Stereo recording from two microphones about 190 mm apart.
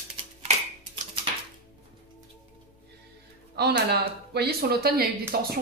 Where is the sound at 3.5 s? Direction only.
60° right (ahead or behind).